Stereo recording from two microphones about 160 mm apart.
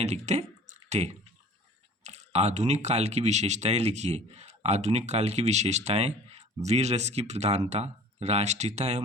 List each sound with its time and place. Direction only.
0.0 s speech: 45° right (ahead or behind)